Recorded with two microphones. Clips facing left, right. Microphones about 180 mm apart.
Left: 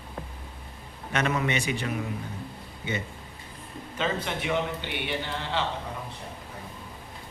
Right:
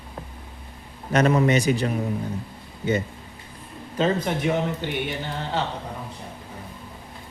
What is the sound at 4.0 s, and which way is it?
Speech, 40° right (ahead or behind).